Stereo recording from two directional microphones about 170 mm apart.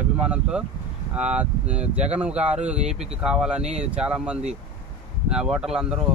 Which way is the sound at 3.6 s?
40° right (ahead or behind).